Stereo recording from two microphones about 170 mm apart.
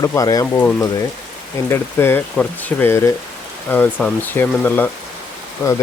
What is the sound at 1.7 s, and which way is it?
Speech, 15° left (ahead or behind).